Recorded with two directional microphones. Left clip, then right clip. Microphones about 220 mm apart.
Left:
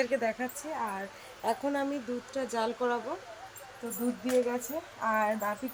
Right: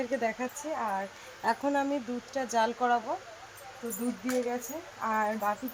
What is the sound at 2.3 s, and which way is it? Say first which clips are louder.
Speech: right 4 dB; 20° right (ahead or behind).